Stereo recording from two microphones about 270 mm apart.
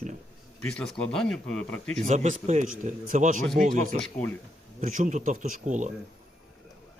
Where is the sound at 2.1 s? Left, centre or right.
Right.